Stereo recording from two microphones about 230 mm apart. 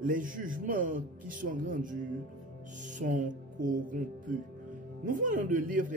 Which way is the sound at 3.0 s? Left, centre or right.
Right.